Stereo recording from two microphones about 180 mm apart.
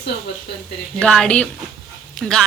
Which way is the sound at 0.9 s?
5° left (ahead or behind).